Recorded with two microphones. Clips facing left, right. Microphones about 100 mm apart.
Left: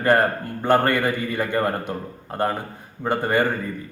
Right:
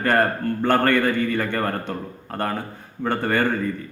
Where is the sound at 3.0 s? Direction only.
15° left (ahead or behind).